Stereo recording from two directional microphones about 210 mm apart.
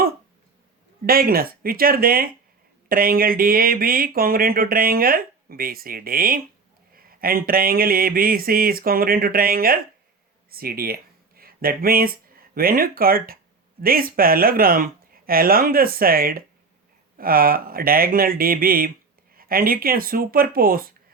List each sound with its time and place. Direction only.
1.0 s speech: 45° right (ahead or behind)